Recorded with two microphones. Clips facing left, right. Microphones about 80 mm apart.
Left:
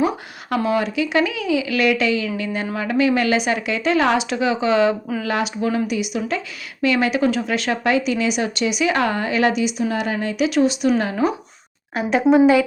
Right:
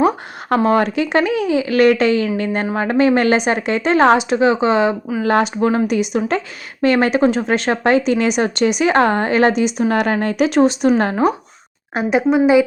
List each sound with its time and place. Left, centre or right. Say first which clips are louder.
0.5 s speech: right 5 dB; right
5.2 s speech: right 8 dB; right
9.9 s speech: right 6 dB; right
12.1 s a woman's voice: right 1 dB; centre